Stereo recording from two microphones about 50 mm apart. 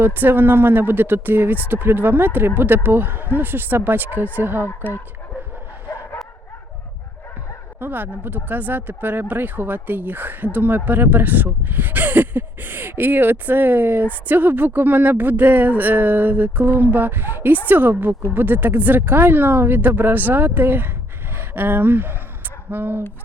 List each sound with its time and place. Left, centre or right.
0.0 s speech: right
4.6 s speech: left
7.8 s speech: right